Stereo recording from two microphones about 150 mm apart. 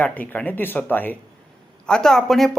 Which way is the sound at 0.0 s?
10° left (ahead or behind).